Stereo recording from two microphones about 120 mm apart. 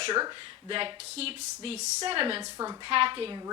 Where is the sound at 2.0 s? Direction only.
50° right (ahead or behind).